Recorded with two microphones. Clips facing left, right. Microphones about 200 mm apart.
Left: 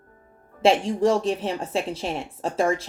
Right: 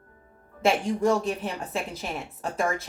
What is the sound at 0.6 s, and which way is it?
A woman's voice, 30° left (ahead or behind).